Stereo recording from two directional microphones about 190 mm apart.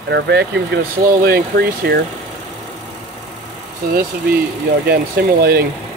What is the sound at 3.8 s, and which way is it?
Speech, 50° right (ahead or behind).